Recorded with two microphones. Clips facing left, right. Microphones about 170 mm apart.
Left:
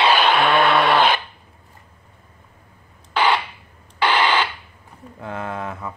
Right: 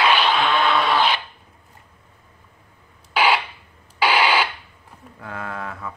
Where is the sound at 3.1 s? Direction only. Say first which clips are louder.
Even; 10° right (ahead or behind).